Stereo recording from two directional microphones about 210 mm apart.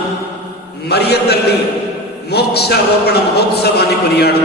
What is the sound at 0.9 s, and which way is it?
A man's voice, 50° left (ahead or behind).